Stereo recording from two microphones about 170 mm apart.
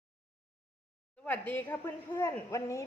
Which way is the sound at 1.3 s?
10° left (ahead or behind).